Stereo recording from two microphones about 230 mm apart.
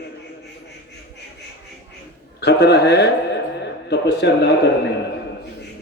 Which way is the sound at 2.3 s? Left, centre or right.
Left.